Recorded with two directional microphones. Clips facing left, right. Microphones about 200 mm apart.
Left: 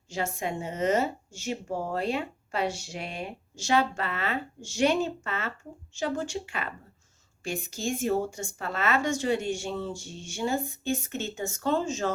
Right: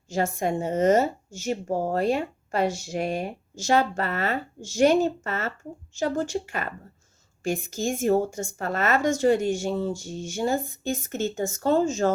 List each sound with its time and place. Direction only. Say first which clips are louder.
0.1 s speech: right 6 dB; 45° right (ahead or behind)